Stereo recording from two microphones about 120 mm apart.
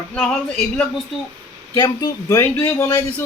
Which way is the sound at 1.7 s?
30° left (ahead or behind).